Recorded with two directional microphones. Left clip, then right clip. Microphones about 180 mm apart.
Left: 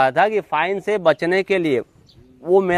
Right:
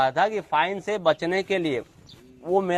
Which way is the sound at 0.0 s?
65° left (ahead or behind).